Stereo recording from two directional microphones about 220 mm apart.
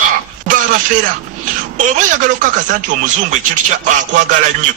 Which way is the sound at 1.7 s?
35° right (ahead or behind).